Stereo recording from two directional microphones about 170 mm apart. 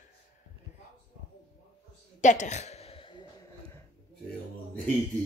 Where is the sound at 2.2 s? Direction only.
45° left (ahead or behind).